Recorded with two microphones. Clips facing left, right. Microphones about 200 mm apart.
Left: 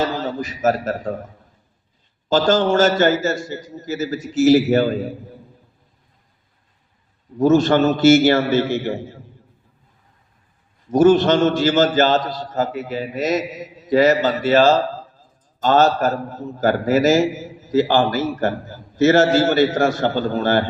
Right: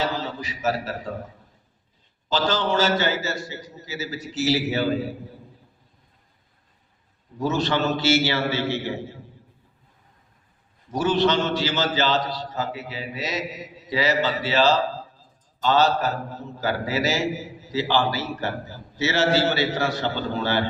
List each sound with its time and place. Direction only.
0.0 s a man's voice: 50° left (ahead or behind)
2.3 s a man's voice: 50° left (ahead or behind)
7.3 s a man's voice: 50° left (ahead or behind)
10.9 s a man's voice: 50° left (ahead or behind)